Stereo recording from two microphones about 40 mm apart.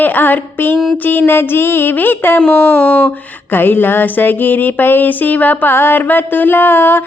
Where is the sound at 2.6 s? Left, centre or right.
Left.